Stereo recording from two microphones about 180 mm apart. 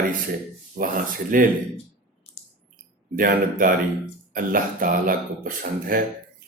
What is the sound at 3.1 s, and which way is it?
Speech, 50° right (ahead or behind).